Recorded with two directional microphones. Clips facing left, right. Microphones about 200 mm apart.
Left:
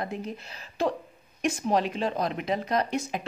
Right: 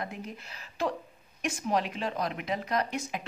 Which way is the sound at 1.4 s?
30° left (ahead or behind).